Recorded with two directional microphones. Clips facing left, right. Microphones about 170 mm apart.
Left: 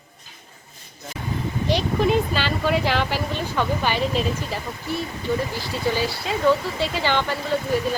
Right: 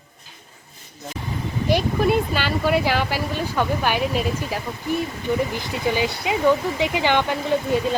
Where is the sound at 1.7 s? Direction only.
10° right (ahead or behind).